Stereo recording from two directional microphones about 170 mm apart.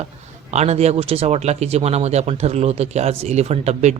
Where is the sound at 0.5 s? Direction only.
40° right (ahead or behind).